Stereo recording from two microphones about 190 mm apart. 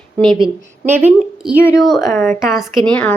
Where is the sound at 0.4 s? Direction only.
10° right (ahead or behind).